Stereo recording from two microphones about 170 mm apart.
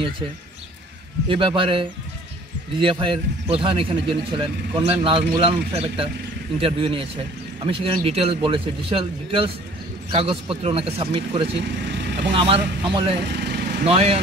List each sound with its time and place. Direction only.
1.3 s a man's voice: 30° right (ahead or behind)
11.5 s speech: 90° right
12.4 s speech: 30° right (ahead or behind)
13.2 s vehicle: 90° right
13.8 s speech: 35° right (ahead or behind)